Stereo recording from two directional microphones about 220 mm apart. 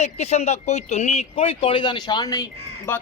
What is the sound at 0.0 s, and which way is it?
Speech, 30° left (ahead or behind).